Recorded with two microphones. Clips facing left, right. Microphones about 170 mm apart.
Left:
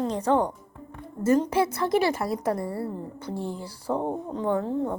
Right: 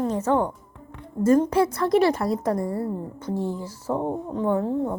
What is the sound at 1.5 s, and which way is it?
A woman's voice, 25° left (ahead or behind).